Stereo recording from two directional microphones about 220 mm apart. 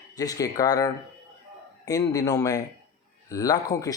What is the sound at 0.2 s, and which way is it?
A man's voice, 15° left (ahead or behind).